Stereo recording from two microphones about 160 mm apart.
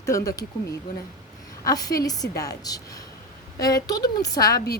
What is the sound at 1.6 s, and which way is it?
A woman's voice, 20° left (ahead or behind).